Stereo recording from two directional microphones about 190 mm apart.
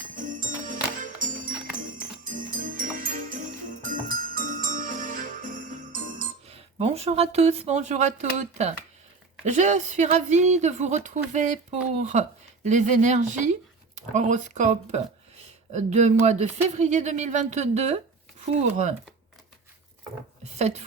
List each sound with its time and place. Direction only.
0.2 s music: 45° right (ahead or behind)
2.6 s music: 45° right (ahead or behind)
4.4 s jingle bell: 45° right (ahead or behind)
6.5 s speech: 35° right (ahead or behind)
20.4 s speech: 35° right (ahead or behind)